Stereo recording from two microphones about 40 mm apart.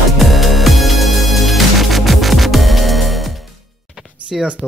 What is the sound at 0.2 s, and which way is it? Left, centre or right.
Music, centre.